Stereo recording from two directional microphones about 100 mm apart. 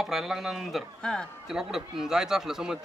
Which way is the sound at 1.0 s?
10° left (ahead or behind).